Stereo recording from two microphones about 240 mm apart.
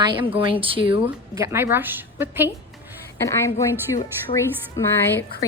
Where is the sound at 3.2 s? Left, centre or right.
Centre.